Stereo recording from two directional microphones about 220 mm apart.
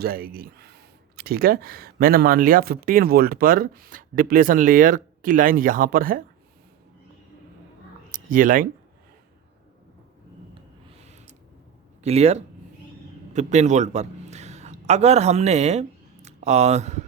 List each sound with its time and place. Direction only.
0.0 s speech: 40° right (ahead or behind)
8.1 s speech: 40° right (ahead or behind)
11.0 s a sound: 30° right (ahead or behind)
12.0 s a man's voice: 30° right (ahead or behind)